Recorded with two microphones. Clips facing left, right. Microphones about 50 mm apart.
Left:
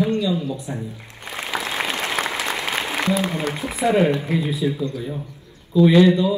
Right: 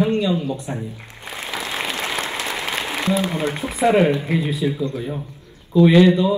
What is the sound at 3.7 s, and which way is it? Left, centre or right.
Speech, right.